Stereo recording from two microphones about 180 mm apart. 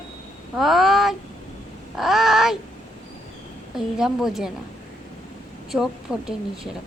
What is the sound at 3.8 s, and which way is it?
Speech, 5° right (ahead or behind).